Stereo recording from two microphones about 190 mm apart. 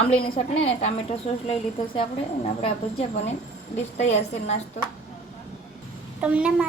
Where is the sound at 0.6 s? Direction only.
35° left (ahead or behind).